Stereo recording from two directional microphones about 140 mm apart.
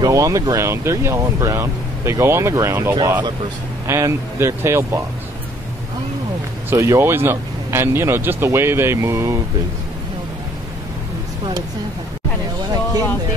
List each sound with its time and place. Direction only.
0.0 s speech: 25° right (ahead or behind)
6.7 s speech: 20° right (ahead or behind)